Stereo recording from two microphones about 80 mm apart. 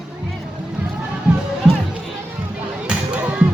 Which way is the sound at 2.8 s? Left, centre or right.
Centre.